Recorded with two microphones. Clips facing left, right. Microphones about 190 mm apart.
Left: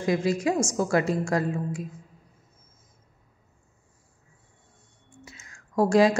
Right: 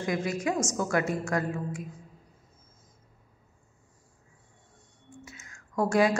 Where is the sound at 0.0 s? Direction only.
30° left (ahead or behind).